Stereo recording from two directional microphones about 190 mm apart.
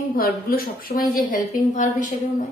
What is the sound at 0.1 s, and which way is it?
A woman's voice, 50° left (ahead or behind).